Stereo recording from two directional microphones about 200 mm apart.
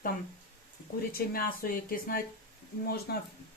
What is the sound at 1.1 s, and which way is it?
Speech, 50° left (ahead or behind).